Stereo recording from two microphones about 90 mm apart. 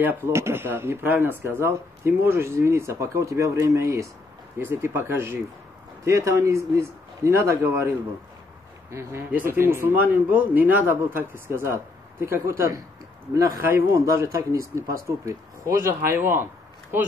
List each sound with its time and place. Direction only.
0.3 s speech: 30° right (ahead or behind)
9.3 s speech: 25° right (ahead or behind)